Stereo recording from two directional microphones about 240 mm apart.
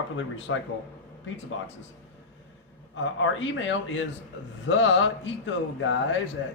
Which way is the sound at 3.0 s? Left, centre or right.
Left.